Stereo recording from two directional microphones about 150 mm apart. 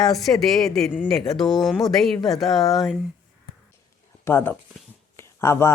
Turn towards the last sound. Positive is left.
turn(degrees=20)  # may be behind; listen again after turning